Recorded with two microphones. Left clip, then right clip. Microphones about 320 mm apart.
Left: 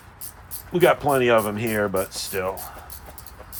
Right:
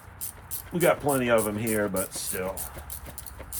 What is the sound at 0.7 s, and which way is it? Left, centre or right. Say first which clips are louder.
Speech: left 5 dB; left.